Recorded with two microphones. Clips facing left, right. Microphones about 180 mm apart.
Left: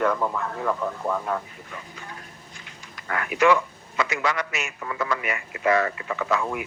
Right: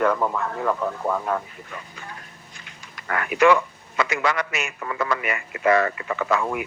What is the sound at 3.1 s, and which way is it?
A man's voice, 60° right (ahead or behind).